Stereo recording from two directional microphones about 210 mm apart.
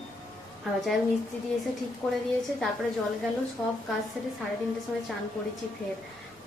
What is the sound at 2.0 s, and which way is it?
Speech, 5° left (ahead or behind).